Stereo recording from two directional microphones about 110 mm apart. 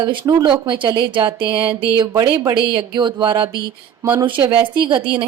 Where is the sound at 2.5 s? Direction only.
45° right (ahead or behind).